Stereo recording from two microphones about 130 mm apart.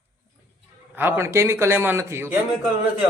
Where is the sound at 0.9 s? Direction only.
15° right (ahead or behind).